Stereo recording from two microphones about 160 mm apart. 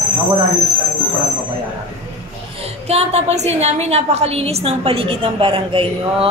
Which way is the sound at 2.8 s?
40° right (ahead or behind).